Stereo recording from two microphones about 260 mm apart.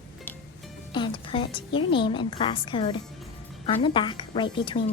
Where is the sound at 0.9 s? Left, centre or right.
Centre.